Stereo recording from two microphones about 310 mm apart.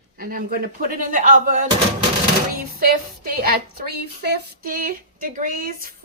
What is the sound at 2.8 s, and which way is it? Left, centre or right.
Speech, right.